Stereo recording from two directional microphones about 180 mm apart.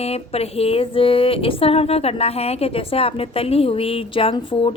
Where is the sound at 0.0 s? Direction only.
35° left (ahead or behind).